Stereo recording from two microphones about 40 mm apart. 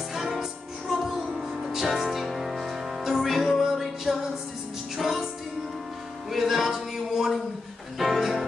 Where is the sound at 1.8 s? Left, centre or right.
Centre.